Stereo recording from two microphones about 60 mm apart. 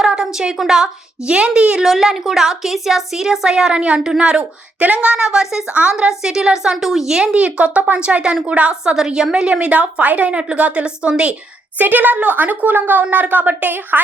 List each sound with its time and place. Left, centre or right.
0.0 s a sound: centre
0.5 s a woman's voice: centre
1.8 s a woman's voice: centre; by 8.7 s right
8.7 s a woman's voice: centre
11.8 s a woman's voice: right